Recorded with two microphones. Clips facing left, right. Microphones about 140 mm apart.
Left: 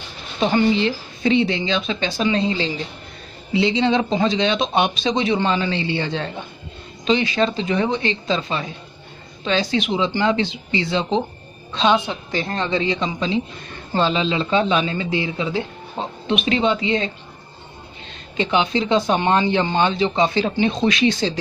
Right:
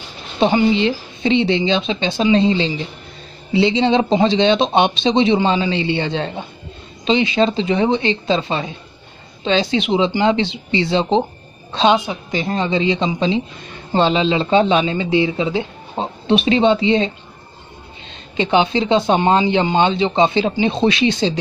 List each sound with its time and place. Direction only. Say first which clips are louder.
0.5 s speech: right 1 dB; 20° right (ahead or behind)
11.9 s a woman's voice: right 2 dB; 15° right (ahead or behind)
18.3 s speech: right 4 dB; 25° right (ahead or behind)